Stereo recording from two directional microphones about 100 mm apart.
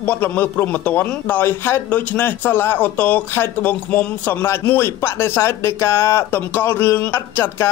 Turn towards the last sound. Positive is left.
turn(degrees=20)  # may be behind; listen again after turning